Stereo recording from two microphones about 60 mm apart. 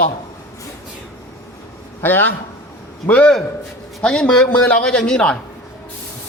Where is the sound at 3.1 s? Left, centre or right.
Centre.